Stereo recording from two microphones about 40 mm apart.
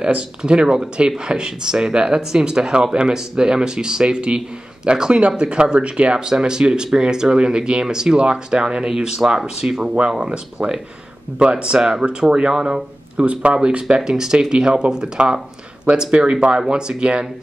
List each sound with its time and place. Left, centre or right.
0.0 s speech: right
9.9 s speech: right
13.3 s speech: right